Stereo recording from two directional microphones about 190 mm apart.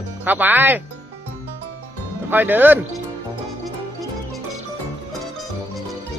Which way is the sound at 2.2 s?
10° right (ahead or behind).